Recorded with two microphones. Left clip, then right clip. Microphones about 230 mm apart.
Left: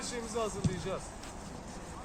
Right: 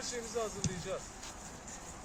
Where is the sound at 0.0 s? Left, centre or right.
Left.